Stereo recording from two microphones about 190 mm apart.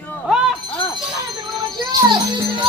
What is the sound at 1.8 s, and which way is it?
Speech, 25° right (ahead or behind).